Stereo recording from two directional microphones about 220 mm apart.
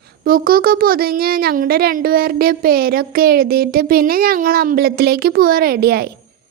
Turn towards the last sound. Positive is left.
turn(degrees=-45)  # may be behind; listen again after turning